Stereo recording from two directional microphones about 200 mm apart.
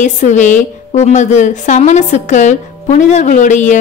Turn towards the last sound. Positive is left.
turn(degrees=40)  # may be behind; listen again after turning